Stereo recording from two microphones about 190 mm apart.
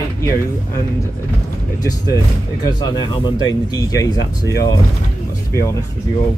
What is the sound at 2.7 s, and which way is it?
Speech, 20° left (ahead or behind).